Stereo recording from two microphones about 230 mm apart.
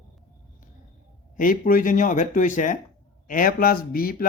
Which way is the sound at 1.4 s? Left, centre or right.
Left.